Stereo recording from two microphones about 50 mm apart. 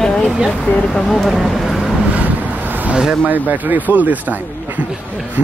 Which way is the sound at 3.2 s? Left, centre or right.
Right.